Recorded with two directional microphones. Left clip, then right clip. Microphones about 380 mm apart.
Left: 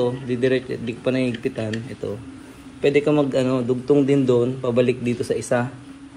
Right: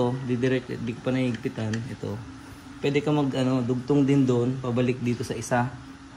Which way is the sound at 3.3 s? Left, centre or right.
Centre.